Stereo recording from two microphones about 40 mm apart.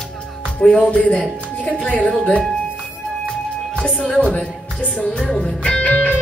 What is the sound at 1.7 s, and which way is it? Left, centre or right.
Music, left.